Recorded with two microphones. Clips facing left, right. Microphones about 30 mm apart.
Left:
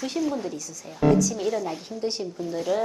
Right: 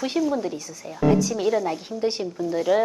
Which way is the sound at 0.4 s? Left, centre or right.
Right.